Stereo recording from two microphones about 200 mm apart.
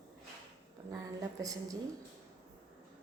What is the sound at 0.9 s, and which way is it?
Speech, 15° right (ahead or behind).